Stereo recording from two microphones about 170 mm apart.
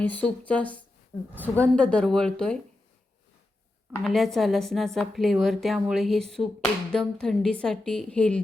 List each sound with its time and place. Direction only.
0.0 s speech: 10° left (ahead or behind)
1.1 s a woman's voice: 20° left (ahead or behind)
1.5 s a woman's voice: 5° left (ahead or behind)
3.9 s a woman's voice: 5° left (ahead or behind)